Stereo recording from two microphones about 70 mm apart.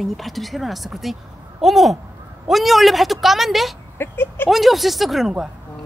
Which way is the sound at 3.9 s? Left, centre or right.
Left.